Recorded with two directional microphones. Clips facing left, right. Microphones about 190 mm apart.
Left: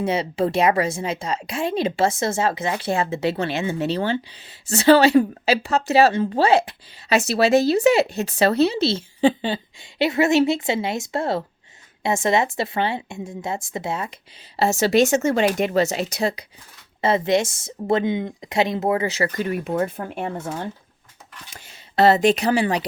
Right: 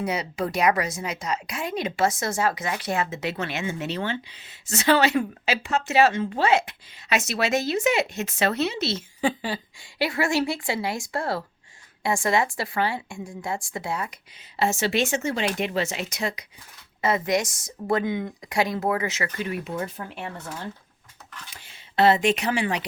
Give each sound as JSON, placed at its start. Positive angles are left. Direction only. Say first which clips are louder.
{"t": 0.0, "sound": "a woman's voice", "louder": "left 6 dB", "side_deg": 25}